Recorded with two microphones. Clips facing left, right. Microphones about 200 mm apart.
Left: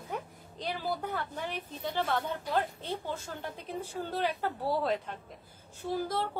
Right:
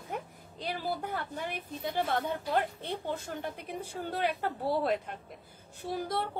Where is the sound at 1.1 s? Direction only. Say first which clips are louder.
Even; 10° right (ahead or behind).